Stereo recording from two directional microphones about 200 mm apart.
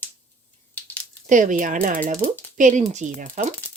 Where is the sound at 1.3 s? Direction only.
40° right (ahead or behind).